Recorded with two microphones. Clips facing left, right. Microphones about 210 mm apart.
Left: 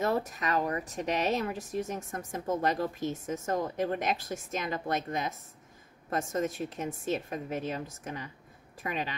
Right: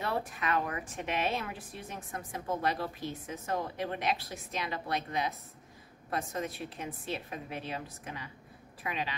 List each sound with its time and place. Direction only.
0.0 s a woman's voice: 40° left (ahead or behind)